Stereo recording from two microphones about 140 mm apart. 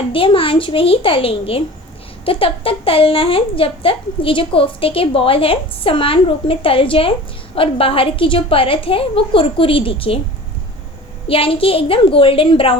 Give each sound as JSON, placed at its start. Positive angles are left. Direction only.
{"t": 0.1, "sound": "speech", "side_deg": 40}
{"t": 11.3, "sound": "speech", "side_deg": 40}